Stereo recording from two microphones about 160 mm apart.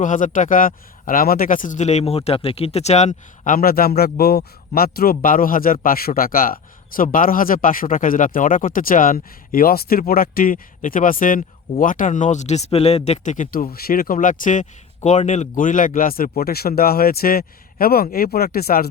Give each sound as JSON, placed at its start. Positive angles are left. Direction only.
{"t": 0.0, "sound": "speech", "side_deg": 55}